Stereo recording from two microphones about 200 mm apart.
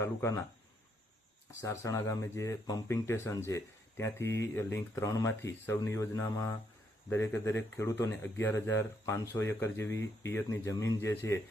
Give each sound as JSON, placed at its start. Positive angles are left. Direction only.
{"t": 0.0, "sound": "speech", "side_deg": 15}
{"t": 1.5, "sound": "speech", "side_deg": 15}